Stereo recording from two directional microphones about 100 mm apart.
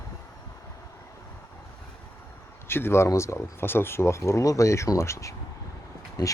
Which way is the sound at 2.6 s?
25° left (ahead or behind).